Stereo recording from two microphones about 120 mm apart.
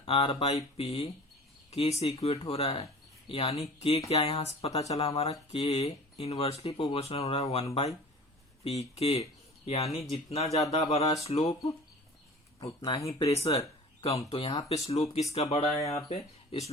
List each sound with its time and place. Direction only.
0.0 s speech: 50° left (ahead or behind)
12.5 s speech: 45° left (ahead or behind)
13.3 s speech: 60° left (ahead or behind)